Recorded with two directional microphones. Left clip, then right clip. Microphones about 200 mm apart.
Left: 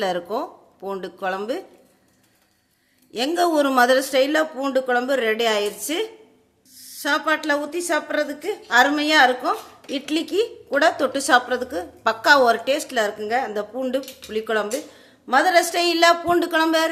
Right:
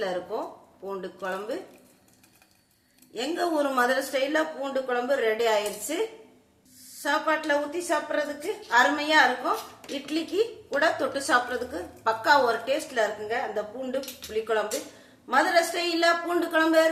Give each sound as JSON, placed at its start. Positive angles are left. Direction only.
{"t": 0.0, "sound": "a woman's voice", "side_deg": 55}
{"t": 3.1, "sound": "a woman's voice", "side_deg": 55}
{"t": 7.0, "sound": "a woman's voice", "side_deg": 50}